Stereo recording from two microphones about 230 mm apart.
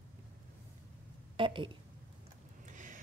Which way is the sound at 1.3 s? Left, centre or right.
Right.